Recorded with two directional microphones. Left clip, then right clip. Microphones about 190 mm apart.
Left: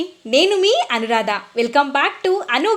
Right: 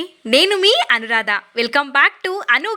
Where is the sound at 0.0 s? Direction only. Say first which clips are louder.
Right 1 dB; 15° right (ahead or behind).